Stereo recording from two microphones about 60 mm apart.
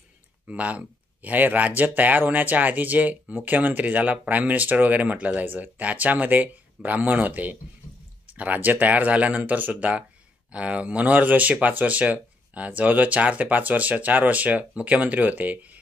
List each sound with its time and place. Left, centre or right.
0.5 s speech: right